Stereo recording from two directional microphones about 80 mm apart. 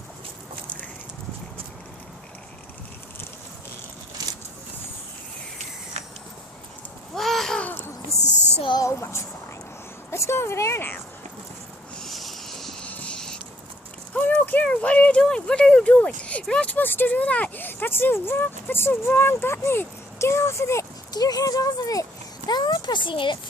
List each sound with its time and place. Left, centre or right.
4.2 s a sound: right
7.2 s babbling: centre
7.6 s a sound: left
8.8 s a woman's voice: left
11.9 s vehicle: centre
12.8 s music: centre
14.1 s speech: centre; by 20.8 s left
21.1 s speech: left
22.4 s speech: left